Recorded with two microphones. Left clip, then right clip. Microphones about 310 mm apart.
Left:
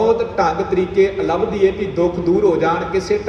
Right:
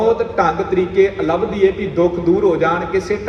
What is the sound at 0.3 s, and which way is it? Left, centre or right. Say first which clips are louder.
A man's voice: right 1 dB; right.